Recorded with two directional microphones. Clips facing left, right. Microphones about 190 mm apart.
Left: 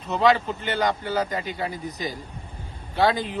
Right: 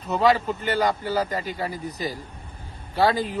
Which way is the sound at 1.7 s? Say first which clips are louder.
Right 1 dB; 40° right (ahead or behind).